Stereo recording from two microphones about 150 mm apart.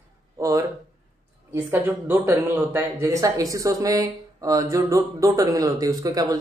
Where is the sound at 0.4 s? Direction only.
20° right (ahead or behind).